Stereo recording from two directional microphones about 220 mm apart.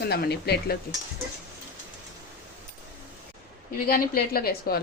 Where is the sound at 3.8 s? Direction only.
40° left (ahead or behind).